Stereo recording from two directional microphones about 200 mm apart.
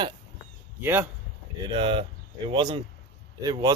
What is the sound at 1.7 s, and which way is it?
Speech, 25° right (ahead or behind).